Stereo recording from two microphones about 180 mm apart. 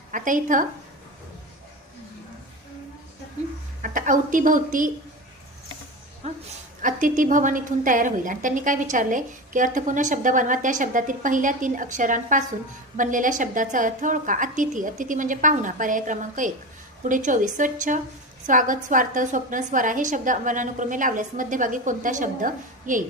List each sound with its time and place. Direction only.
0.1 s a woman's voice: 45° right (ahead or behind)
3.8 s a woman's voice: 45° right (ahead or behind)
6.2 s a sound: 35° right (ahead or behind)
6.8 s a woman's voice: 45° right (ahead or behind)